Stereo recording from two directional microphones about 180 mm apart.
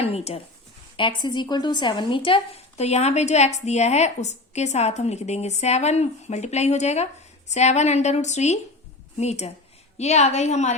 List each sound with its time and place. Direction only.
0.0 s speech: 35° left (ahead or behind)